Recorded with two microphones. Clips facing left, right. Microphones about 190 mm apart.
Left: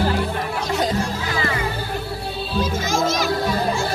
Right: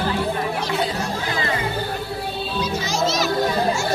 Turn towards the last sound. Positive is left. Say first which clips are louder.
# left 1 dB
turn(degrees=50)  # may be behind; listen again after turning